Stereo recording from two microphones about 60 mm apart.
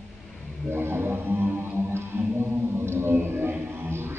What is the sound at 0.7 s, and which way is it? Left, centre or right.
Music, right.